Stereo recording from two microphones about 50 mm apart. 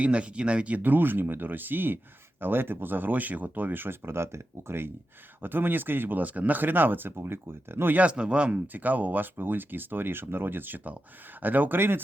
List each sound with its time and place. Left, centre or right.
0.0 s speech: right
0.8 s speech: right
5.4 s speech: right
7.9 s speech: right
8.5 s speech: right